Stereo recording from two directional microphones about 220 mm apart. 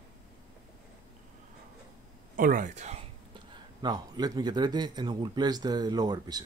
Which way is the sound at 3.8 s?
15° right (ahead or behind).